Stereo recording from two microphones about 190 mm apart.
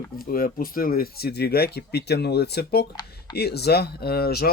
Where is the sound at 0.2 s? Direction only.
50° left (ahead or behind).